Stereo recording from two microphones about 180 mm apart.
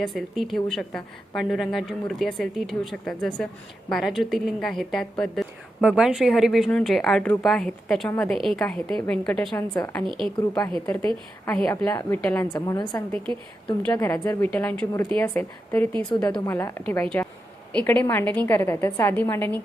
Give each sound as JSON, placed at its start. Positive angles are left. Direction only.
{"t": 0.0, "sound": "a woman's voice", "side_deg": 0}
{"t": 9.6, "sound": "a woman's voice", "side_deg": 15}
{"t": 10.1, "sound": "a woman's voice", "side_deg": -25}
{"t": 11.0, "sound": "a woman's voice", "side_deg": 10}
{"t": 12.5, "sound": "a woman's voice", "side_deg": 20}